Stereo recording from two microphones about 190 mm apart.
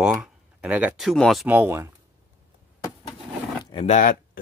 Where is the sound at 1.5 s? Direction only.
10° right (ahead or behind).